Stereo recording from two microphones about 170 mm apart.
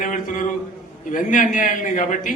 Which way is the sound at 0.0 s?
50° left (ahead or behind).